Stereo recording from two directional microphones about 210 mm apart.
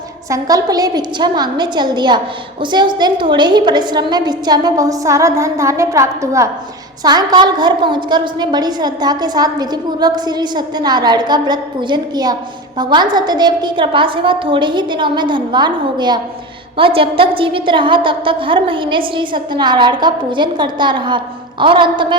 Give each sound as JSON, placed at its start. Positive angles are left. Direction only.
{"t": 0.3, "sound": "a woman's voice", "side_deg": -15}